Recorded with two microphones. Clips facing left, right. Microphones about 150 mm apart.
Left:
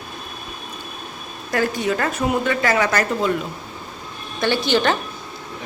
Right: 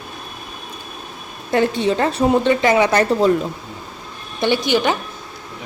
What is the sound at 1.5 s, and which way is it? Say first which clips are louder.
A woman's voice: right 4 dB; 25° right (ahead or behind).